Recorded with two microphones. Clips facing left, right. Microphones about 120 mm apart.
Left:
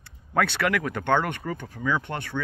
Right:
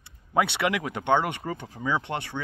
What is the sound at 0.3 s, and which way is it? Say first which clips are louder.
Speech: even; 20° right (ahead or behind).